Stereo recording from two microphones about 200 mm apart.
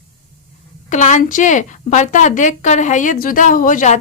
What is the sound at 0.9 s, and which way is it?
Speech, 40° left (ahead or behind).